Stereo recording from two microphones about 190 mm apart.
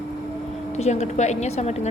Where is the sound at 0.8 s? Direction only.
35° left (ahead or behind).